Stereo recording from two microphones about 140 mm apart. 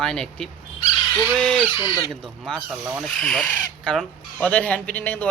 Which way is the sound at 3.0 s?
5° left (ahead or behind).